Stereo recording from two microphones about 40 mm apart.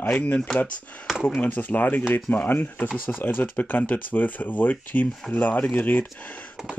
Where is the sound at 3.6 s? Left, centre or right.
Left.